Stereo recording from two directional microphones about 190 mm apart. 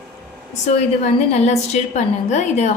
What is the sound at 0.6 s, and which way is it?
A woman's voice, 35° left (ahead or behind).